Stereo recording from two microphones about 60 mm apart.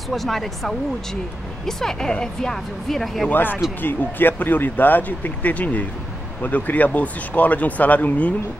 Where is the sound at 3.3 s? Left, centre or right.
Left.